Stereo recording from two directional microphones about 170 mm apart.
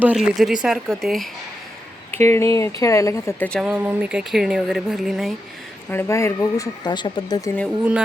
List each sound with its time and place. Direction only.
0.0 s speech: 5° right (ahead or behind)
2.1 s speech: 15° left (ahead or behind)
3.5 s speech: 5° right (ahead or behind)
5.9 s speech: 15° left (ahead or behind)